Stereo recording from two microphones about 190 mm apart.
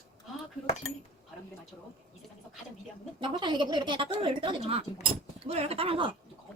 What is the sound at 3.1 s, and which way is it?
Speech, 25° right (ahead or behind).